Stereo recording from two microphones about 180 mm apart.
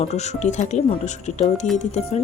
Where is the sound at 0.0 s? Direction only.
40° left (ahead or behind).